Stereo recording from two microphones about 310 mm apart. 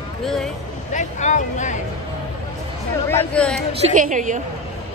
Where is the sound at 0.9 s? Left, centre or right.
Left.